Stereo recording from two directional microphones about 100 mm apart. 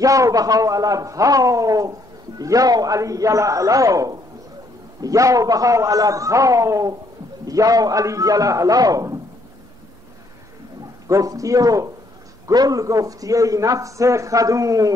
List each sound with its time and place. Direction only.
0.0 s a man's voice: 35° right (ahead or behind)
11.1 s a man's voice: 35° right (ahead or behind)